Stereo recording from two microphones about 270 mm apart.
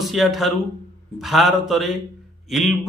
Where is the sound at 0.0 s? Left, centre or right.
Centre.